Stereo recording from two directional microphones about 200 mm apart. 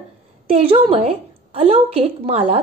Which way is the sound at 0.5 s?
30° right (ahead or behind).